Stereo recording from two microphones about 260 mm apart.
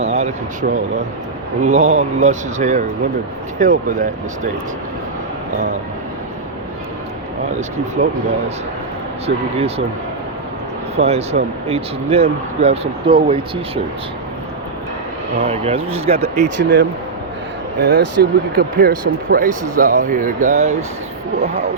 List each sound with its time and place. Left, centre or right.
0.0 s speech: right
8.0 s speech: right
9.2 s speech: right
10.9 s speech: right
15.4 s speech: right
16.6 s speech: right